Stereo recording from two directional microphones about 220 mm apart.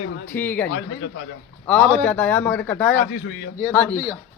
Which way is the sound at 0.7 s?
55° left (ahead or behind).